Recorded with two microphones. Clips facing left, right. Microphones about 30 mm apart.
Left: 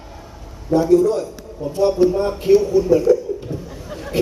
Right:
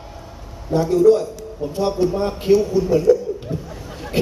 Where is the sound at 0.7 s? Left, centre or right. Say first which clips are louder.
Even; centre.